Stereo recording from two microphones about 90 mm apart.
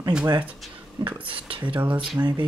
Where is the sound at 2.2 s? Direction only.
20° right (ahead or behind).